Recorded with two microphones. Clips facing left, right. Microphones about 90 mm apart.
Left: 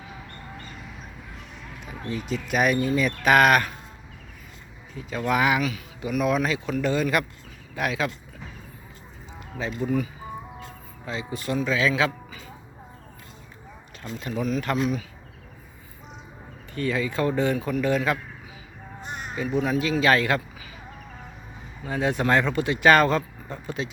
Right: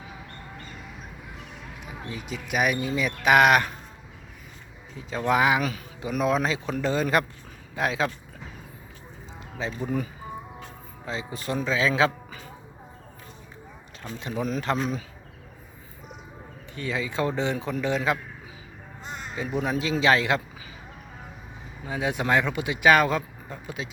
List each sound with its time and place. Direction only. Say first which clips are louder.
0.5 s a sound: left 1 dB; centre (ahead or behind)
1.8 s speech: left 5 dB; 10° right (ahead or behind)
4.9 s a man's voice: right 1 dB; 25° right (ahead or behind)
9.6 s a man's voice: left 1 dB; 30° right (ahead or behind)
11.0 s speech: left 1 dB; 30° right (ahead or behind)
14.2 s a man's voice: left 1 dB; 25° right (ahead or behind)
14.4 s a man's voice: left 2 dB; 40° right (ahead or behind)
16.7 s a man's voice: left 3 dB; 20° right (ahead or behind)
19.5 s a man's voice: left 2 dB; 30° right (ahead or behind)
21.8 s speech: left 2 dB; 10° right (ahead or behind)